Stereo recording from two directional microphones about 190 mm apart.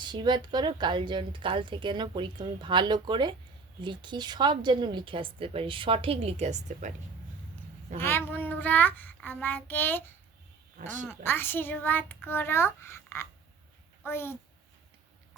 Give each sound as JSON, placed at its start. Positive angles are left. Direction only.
{"t": 0.1, "sound": "speech", "side_deg": -25}
{"t": 7.9, "sound": "a child's voice", "side_deg": 10}
{"t": 10.8, "sound": "speech", "side_deg": -40}
{"t": 11.0, "sound": "a child's voice", "side_deg": 10}